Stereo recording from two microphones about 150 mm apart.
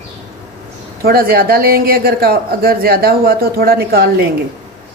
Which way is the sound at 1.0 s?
80° right.